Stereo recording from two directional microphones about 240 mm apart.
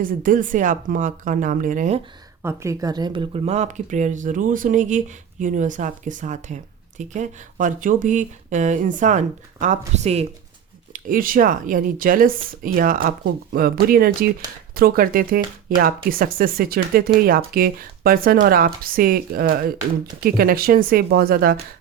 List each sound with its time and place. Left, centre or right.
0.0 s speech: right
2.4 s speech: centre; by 21.6 s right